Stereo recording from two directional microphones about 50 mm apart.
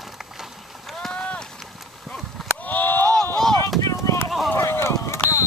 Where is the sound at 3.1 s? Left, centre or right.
Centre.